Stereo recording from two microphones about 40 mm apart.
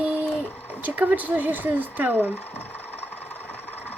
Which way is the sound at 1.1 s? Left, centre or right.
Right.